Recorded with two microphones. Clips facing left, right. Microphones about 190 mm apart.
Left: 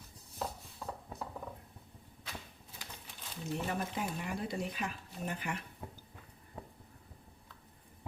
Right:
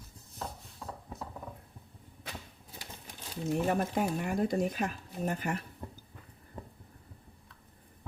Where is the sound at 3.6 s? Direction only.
50° right (ahead or behind).